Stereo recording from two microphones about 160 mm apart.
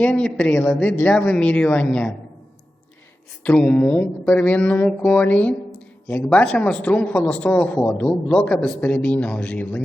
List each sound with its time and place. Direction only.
0.0 s a man's voice: 5° left (ahead or behind)
3.4 s a man's voice: 10° left (ahead or behind)